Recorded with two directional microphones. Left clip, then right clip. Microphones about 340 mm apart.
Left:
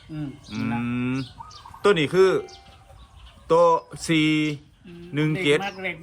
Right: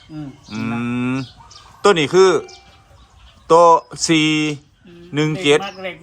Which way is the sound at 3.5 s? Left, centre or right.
Centre.